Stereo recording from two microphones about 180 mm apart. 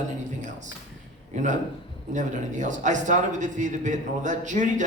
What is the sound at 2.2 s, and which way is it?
A woman's voice, 45° right (ahead or behind).